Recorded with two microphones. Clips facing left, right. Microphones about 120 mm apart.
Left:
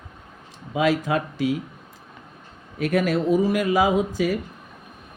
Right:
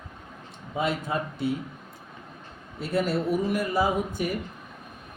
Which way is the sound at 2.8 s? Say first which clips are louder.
Left 5 dB; 90° left.